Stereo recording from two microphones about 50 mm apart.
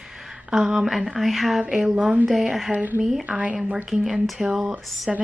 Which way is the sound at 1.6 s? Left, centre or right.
Centre.